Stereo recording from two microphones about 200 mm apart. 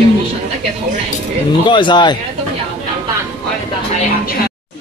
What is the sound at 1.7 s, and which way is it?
Speech, 25° left (ahead or behind).